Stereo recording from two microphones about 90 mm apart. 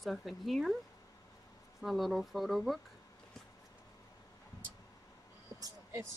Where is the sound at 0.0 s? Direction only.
Centre (ahead or behind).